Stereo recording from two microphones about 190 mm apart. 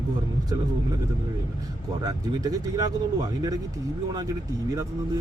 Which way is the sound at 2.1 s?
20° right (ahead or behind).